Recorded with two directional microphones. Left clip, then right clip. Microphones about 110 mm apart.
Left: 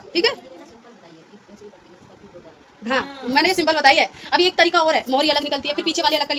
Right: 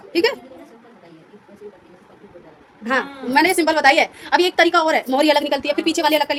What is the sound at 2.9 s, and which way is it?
A woman's voice, 50° right (ahead or behind).